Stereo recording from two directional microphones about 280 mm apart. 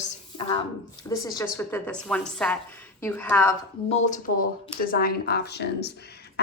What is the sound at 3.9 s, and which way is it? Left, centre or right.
A woman's voice, left.